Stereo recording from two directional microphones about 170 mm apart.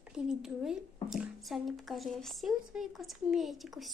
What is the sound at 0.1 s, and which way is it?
Speech, 5° right (ahead or behind).